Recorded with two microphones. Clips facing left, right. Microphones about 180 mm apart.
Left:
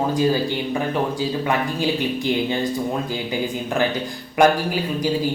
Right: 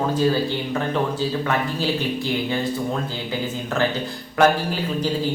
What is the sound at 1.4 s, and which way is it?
Speech, 15° left (ahead or behind).